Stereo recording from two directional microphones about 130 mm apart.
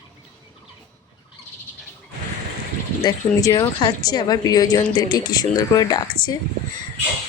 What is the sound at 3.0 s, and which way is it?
A woman's voice, 30° left (ahead or behind).